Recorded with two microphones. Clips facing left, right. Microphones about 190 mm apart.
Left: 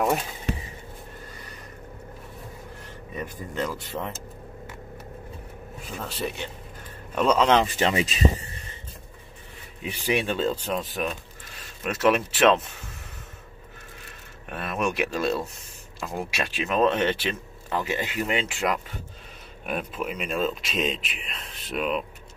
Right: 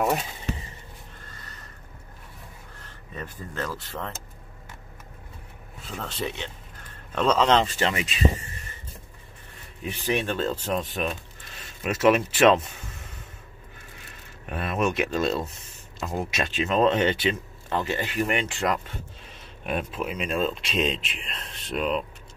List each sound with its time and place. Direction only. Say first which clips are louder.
0.5 s a sound: left 2 dB; 60° left (ahead or behind)
3.2 s speech: left 3 dB; 15° left (ahead or behind)
5.9 s speech: even; 10° left (ahead or behind)
7.9 s speech: left 5 dB; 35° left (ahead or behind)
10.0 s speech: left 1 dB; 10° left (ahead or behind)
10.5 s speech: right 1 dB; centre (ahead or behind)
14.5 s speech: right 2 dB; 5° right (ahead or behind); by 18.2 s 15° left (ahead or behind)
18.2 s speech: right 1 dB; centre (ahead or behind)